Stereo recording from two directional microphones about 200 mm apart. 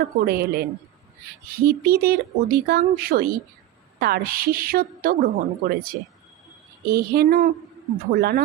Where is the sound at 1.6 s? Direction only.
50° right (ahead or behind).